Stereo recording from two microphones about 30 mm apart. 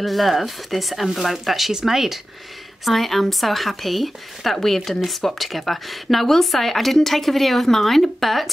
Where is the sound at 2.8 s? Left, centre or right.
Centre.